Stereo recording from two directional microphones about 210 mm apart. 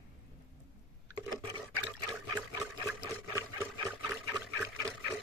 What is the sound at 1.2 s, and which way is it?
Water, 20° right (ahead or behind).